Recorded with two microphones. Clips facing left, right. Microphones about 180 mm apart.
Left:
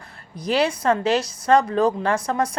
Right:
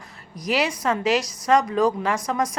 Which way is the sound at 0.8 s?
30° left (ahead or behind).